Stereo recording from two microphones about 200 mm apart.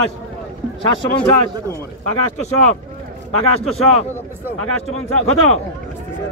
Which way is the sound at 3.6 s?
30° left (ahead or behind).